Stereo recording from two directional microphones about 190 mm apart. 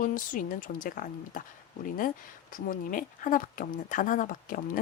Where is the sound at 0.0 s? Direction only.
45° left (ahead or behind).